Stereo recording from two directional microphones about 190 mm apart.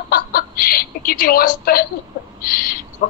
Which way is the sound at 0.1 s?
50° left (ahead or behind).